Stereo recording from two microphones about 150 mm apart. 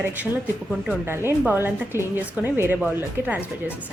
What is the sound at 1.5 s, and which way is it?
Speech, 15° right (ahead or behind).